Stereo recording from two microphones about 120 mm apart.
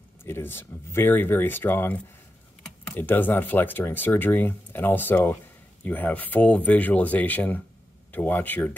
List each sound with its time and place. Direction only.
0.2 s speech: 20° left (ahead or behind)
3.0 s speech: 15° left (ahead or behind)